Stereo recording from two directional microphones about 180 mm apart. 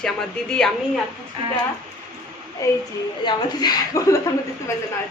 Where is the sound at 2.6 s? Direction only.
15° left (ahead or behind).